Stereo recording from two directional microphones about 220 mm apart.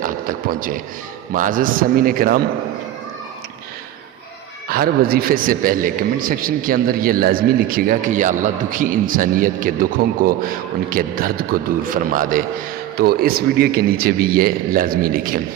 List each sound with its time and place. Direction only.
0.0 s a man's voice: 40° right (ahead or behind)
4.7 s a man's voice: 40° right (ahead or behind)